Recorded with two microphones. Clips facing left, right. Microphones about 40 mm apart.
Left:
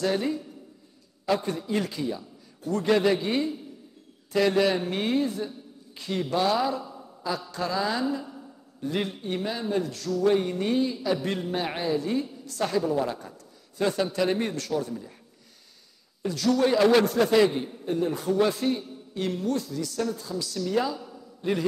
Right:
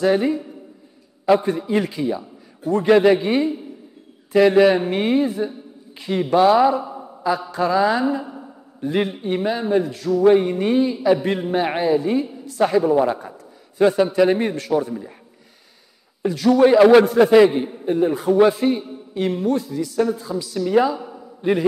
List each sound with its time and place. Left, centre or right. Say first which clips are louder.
0.0 s a man's voice: right 8 dB; right
16.2 s a woman's voice: right 9 dB; centre